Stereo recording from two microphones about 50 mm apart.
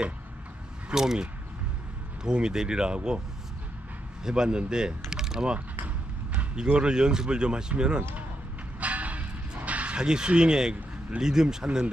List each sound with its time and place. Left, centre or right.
0.8 s speech: centre
4.2 s speech: centre
5.1 s mechanisms: centre
6.5 s speech: centre
8.7 s a sound: right
9.9 s speech: centre